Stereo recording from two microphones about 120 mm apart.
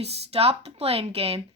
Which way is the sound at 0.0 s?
60° right (ahead or behind).